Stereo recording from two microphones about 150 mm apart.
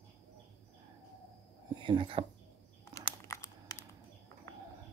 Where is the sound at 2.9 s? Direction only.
25° left (ahead or behind).